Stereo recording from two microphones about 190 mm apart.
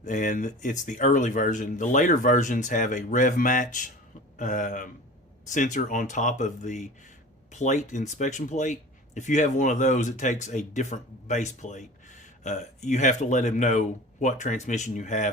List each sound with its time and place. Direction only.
0.0 s speech: 40° left (ahead or behind)